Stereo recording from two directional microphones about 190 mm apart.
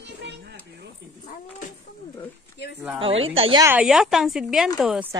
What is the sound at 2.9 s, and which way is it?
Speech, 30° right (ahead or behind).